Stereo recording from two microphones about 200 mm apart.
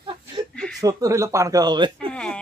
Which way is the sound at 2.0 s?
5° left (ahead or behind).